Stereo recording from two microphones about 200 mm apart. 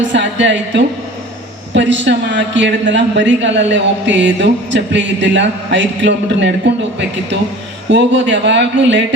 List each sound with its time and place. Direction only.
0.0 s a woman's voice: 65° right (ahead or behind)
7.9 s a woman's voice: 65° right (ahead or behind)